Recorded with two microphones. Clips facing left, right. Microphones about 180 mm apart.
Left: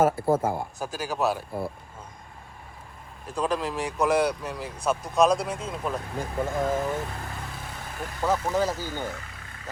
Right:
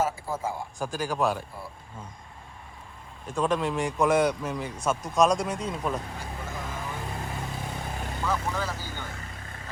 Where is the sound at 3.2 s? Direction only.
Centre (ahead or behind).